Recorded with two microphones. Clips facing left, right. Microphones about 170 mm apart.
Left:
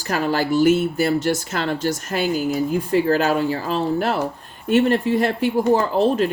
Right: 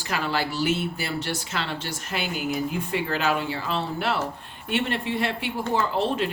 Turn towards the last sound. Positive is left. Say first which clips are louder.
# left 6 dB
turn(degrees=40)  # may be behind; listen again after turning